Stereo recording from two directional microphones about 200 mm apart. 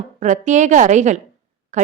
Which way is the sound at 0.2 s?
35° right (ahead or behind).